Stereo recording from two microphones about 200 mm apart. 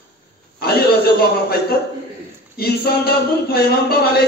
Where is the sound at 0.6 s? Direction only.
50° left (ahead or behind).